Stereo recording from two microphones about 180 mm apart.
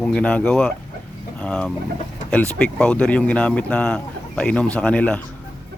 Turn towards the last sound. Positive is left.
turn(degrees=5)  # may be behind; listen again after turning